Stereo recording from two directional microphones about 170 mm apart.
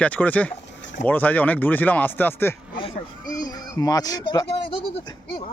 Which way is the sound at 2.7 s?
25° left (ahead or behind).